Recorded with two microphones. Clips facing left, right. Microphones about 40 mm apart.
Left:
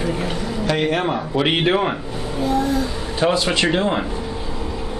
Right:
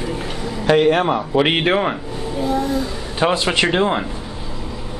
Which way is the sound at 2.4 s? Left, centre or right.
Centre.